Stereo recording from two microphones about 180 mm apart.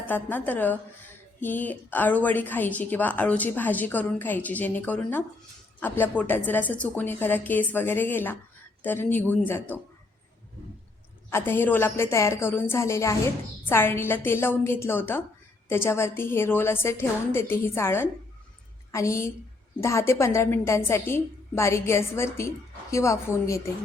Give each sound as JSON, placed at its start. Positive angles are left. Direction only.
{"t": 0.0, "sound": "a woman's voice", "side_deg": 10}
{"t": 11.3, "sound": "a woman's voice", "side_deg": 15}